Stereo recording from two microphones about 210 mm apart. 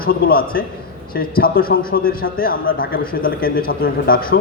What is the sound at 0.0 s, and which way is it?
A man's voice, 45° left (ahead or behind).